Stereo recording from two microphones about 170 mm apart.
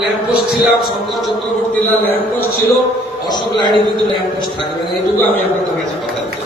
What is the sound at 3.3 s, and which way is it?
Speech, 25° left (ahead or behind).